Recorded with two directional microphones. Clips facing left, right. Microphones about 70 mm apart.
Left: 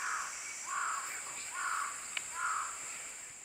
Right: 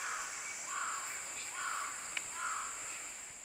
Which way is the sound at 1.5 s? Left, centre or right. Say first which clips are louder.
Left 4 dB; centre.